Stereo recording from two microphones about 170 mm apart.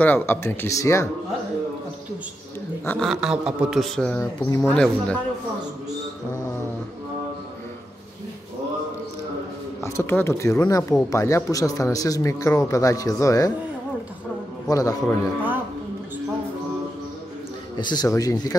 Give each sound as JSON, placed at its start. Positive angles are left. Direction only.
{"t": 0.0, "sound": "speech", "side_deg": 10}
{"t": 2.8, "sound": "a man's voice", "side_deg": 10}
{"t": 3.1, "sound": "a man's voice", "side_deg": -5}
{"t": 4.4, "sound": "speech", "side_deg": 20}
{"t": 4.7, "sound": "a man's voice", "side_deg": 5}
{"t": 9.8, "sound": "speech", "side_deg": 15}
{"t": 14.7, "sound": "speech", "side_deg": 20}
{"t": 17.7, "sound": "speech", "side_deg": 25}